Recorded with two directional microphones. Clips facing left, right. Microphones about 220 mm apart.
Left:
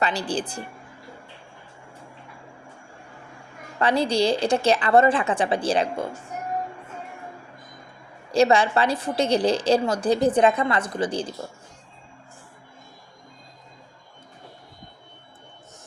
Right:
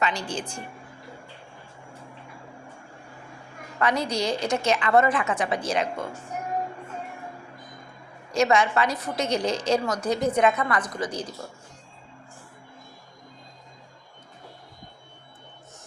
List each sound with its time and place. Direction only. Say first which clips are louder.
0.0 s a woman's voice: left 3 dB; 35° left (ahead or behind)
3.8 s a woman's voice: left 4 dB; 30° left (ahead or behind)
8.3 s a woman's voice: left 3 dB; 30° left (ahead or behind)